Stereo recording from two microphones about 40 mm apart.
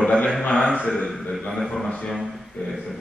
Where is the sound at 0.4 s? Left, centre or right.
Centre.